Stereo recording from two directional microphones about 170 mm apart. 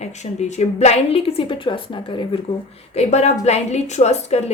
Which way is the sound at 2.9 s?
40° left (ahead or behind).